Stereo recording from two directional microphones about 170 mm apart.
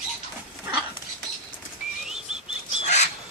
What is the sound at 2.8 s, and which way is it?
Bird, 40° left (ahead or behind).